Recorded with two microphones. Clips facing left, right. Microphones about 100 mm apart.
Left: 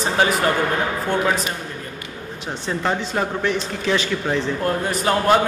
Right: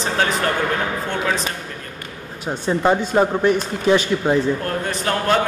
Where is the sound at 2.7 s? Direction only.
15° right (ahead or behind).